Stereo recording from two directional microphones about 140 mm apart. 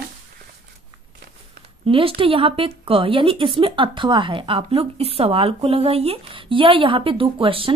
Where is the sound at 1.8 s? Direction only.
40° right (ahead or behind).